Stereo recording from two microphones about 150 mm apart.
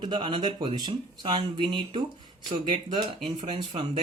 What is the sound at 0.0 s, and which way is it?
Speech, 30° right (ahead or behind).